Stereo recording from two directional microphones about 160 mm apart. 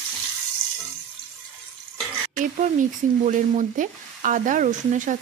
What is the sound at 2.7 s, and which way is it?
Sizzle, 50° right (ahead or behind).